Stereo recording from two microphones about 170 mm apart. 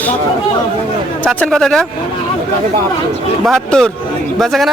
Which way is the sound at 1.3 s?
Centre (ahead or behind).